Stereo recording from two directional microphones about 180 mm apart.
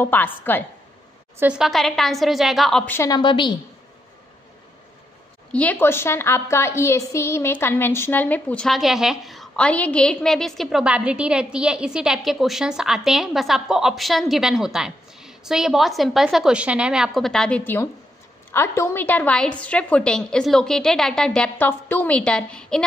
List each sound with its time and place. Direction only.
0.0 s a woman's voice: 10° left (ahead or behind)
1.4 s a woman's voice: 5° right (ahead or behind); by 3.2 s 15° left (ahead or behind)
3.2 s a woman's voice: 25° left (ahead or behind)
5.5 s a woman's voice: 10° left (ahead or behind)